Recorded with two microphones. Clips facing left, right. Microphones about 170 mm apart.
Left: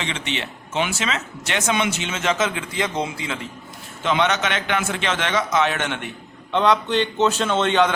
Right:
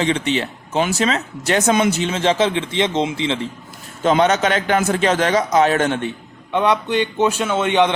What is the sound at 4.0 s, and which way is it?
A man's voice, 40° right (ahead or behind).